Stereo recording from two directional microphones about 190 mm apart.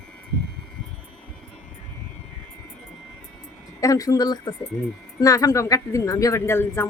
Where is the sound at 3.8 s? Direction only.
20° left (ahead or behind).